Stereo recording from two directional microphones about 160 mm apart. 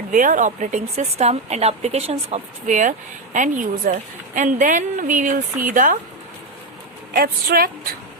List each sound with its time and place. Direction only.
0.1 s speech: 55° right (ahead or behind)
7.1 s a woman's voice: 70° right (ahead or behind)